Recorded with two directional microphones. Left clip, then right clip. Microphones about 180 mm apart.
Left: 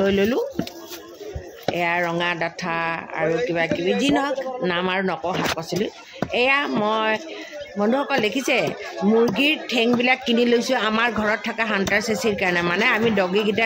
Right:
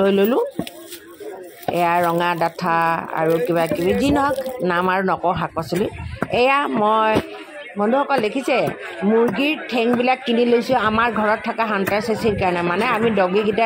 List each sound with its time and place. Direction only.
0.0 s speech: 5° right (ahead or behind)
1.8 s speech: 10° right (ahead or behind)